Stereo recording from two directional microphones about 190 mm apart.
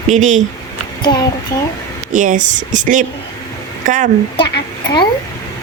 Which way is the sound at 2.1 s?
40° right (ahead or behind).